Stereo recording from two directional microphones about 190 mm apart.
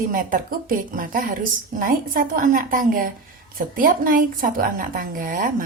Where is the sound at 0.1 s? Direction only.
45° right (ahead or behind).